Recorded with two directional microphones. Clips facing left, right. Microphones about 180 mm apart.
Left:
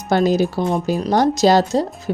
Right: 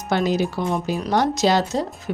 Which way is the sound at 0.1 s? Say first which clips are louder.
Left 5 dB; 40° left (ahead or behind).